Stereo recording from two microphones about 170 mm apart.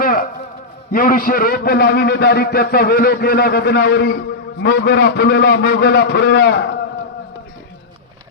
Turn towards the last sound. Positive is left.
turn(degrees=80)